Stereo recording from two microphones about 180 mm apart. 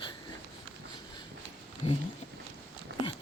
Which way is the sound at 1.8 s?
35° left (ahead or behind).